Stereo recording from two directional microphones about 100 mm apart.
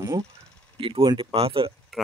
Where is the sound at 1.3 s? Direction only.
70° right (ahead or behind).